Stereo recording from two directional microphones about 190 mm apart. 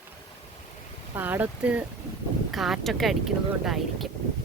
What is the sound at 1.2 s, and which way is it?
Speech, 10° right (ahead or behind).